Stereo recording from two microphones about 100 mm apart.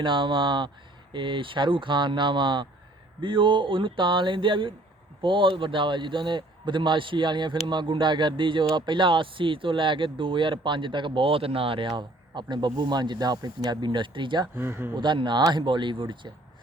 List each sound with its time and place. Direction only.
0.0 s a man's voice: 55° right (ahead or behind)
14.5 s speech: 20° right (ahead or behind)
14.9 s a man's voice: 50° right (ahead or behind)